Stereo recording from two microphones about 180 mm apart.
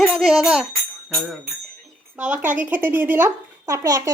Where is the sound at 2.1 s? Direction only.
10° right (ahead or behind).